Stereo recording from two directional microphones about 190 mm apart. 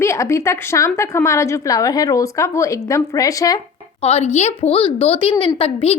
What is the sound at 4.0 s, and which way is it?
A woman's voice, 35° left (ahead or behind).